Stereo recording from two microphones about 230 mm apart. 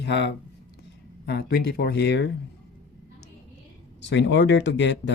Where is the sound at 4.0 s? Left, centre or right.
Left.